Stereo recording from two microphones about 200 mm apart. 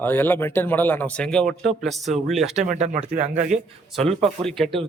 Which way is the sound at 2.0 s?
35° right (ahead or behind).